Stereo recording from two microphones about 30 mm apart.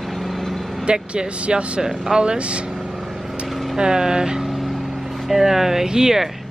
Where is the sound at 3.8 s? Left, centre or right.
Right.